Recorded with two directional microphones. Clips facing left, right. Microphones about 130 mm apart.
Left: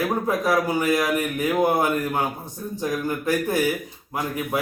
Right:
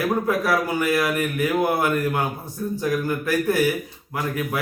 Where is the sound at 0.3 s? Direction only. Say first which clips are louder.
Even; 20° left (ahead or behind).